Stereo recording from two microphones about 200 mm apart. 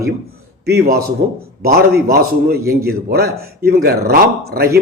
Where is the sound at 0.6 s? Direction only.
55° right (ahead or behind).